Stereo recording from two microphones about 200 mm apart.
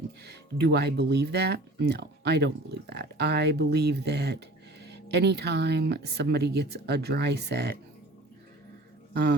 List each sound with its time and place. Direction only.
0.3 s speech: 55° right (ahead or behind)